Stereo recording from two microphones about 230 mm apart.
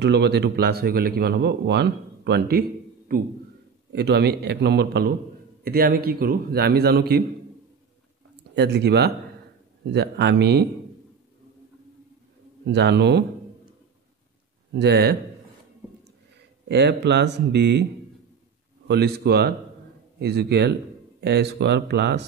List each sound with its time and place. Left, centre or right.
0.0 s a man's voice: right
8.5 s a man's voice: right
12.6 s a man's voice: right
14.7 s a man's voice: right
16.6 s a man's voice: right
18.9 s a man's voice: right